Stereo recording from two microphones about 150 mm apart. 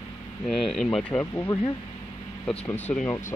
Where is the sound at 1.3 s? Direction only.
20° left (ahead or behind).